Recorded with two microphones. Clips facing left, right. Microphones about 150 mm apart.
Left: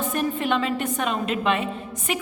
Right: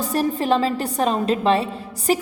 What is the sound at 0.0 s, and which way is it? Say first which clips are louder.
A woman's voice: right 3 dB; 35° right (ahead or behind).